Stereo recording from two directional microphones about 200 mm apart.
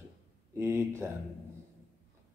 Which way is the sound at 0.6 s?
10° right (ahead or behind).